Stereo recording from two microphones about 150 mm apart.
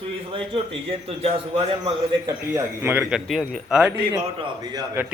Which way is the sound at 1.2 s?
40° right (ahead or behind).